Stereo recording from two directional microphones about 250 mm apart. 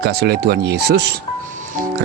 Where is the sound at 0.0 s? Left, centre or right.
Right.